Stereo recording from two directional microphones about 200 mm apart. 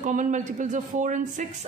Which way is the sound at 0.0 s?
40° right (ahead or behind).